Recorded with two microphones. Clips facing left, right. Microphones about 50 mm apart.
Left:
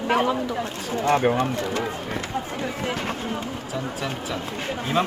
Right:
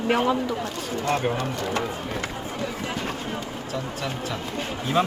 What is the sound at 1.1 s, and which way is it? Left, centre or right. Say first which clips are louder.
Speech: left 5 dB; left.